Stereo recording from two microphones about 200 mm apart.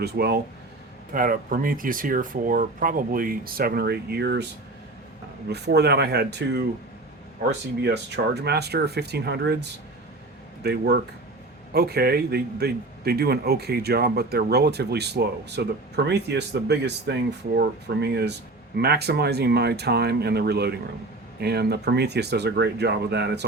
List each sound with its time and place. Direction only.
0.0 s a man's voice: 55° right (ahead or behind)
1.1 s a man's voice: 45° right (ahead or behind)
5.5 s a man's voice: 55° right (ahead or behind)